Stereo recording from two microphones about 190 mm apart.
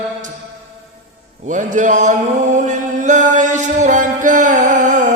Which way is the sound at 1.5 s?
40° right (ahead or behind).